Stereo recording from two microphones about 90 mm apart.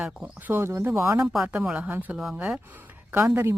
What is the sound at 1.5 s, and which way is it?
Speech, 15° right (ahead or behind).